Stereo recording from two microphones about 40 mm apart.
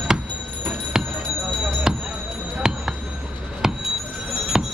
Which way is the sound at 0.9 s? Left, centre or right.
Centre.